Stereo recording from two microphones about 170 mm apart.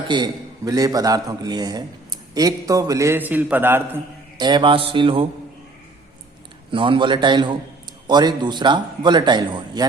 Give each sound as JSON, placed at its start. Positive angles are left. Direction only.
{"t": 0.1, "sound": "a man's voice", "side_deg": -25}
{"t": 4.4, "sound": "speech", "side_deg": -25}
{"t": 6.7, "sound": "a man's voice", "side_deg": -30}